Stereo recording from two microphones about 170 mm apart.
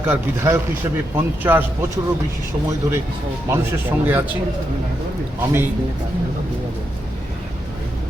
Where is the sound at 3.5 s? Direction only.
10° right (ahead or behind).